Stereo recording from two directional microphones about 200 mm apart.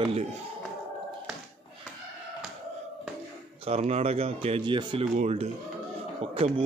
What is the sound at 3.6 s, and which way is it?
Speech, 30° right (ahead or behind).